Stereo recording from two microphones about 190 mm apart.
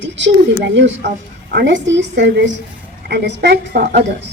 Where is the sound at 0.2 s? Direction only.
65° right (ahead or behind).